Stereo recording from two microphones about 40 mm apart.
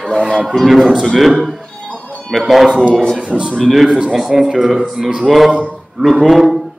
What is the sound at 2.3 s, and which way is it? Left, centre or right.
Speech, centre.